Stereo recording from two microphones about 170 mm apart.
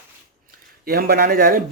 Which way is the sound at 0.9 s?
60° right (ahead or behind).